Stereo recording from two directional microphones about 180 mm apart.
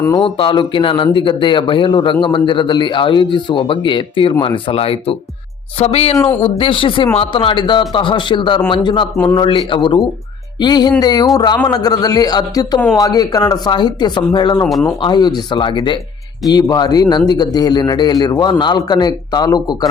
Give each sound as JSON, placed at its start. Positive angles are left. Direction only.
{"t": 0.0, "sound": "a man's voice", "side_deg": 20}
{"t": 9.1, "sound": "a man's voice", "side_deg": 15}
{"t": 9.4, "sound": "a man's voice", "side_deg": 30}
{"t": 14.6, "sound": "speech", "side_deg": 0}
{"t": 14.8, "sound": "a man's voice", "side_deg": 25}